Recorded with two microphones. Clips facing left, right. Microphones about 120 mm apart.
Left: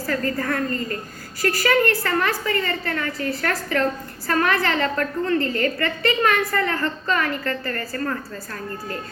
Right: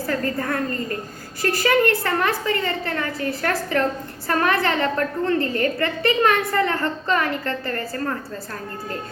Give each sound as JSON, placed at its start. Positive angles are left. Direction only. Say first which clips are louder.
{"t": 0.1, "sound": "a woman's voice", "louder": "left 1 dB", "side_deg": -20}